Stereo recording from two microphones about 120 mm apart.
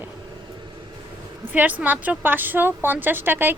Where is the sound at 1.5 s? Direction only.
15° right (ahead or behind).